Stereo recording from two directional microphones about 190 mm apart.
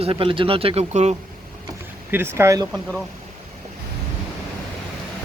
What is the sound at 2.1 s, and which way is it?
Speech, 10° right (ahead or behind).